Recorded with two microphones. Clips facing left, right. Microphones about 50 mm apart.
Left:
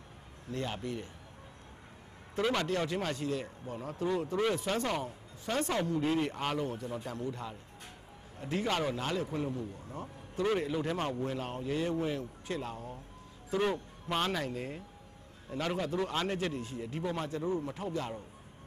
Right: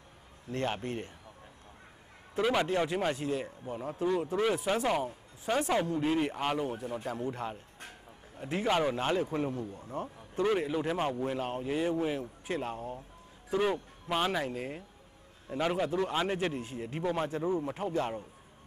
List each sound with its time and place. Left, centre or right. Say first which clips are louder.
0.5 s speech: right 3 dB; right
2.3 s speech: right 3 dB; centre
7.2 s speech: right 3 dB; right
8.4 s speech: right 3 dB; centre
8.9 s a man's voice: right 4 dB; right
9.5 s speech: right 2 dB; right
10.4 s speech: right 2 dB; centre
12.5 s a man's voice: right 5 dB; right
13.5 s a man's voice: right 2 dB; centre